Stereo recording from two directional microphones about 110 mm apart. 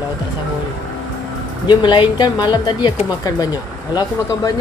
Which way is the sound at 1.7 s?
45° left (ahead or behind).